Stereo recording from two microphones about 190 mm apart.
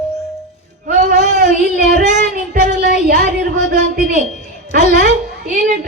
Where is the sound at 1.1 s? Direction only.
35° left (ahead or behind).